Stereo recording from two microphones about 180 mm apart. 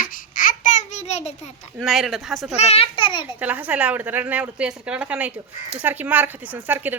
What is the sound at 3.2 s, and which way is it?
A woman's voice, 10° right (ahead or behind).